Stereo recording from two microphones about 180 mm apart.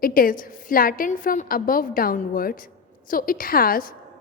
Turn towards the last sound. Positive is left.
turn(degrees=50)  # may be behind; listen again after turning